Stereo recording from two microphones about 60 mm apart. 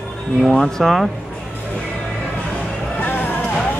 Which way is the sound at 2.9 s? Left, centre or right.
Left.